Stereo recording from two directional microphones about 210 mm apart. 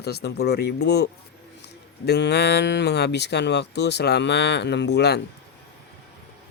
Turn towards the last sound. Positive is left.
turn(degrees=55)  # may be behind; listen again after turning